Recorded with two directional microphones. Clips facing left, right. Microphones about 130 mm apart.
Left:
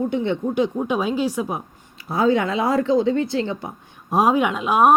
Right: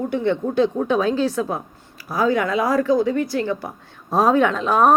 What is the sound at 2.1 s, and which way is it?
A woman's voice, 25° left (ahead or behind).